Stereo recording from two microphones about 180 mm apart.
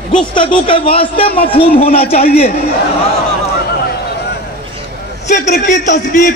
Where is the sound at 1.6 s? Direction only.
60° left (ahead or behind).